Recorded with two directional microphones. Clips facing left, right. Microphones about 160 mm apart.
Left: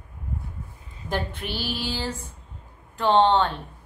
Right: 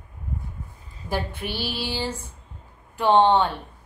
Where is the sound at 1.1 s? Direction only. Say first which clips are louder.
Right 1 dB; 10° right (ahead or behind).